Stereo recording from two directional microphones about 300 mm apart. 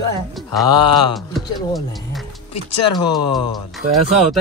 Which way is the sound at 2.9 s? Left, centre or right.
Centre.